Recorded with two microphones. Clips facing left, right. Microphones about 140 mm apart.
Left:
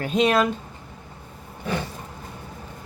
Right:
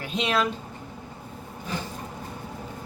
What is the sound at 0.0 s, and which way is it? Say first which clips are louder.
Speech: left 6 dB; 45° left (ahead or behind).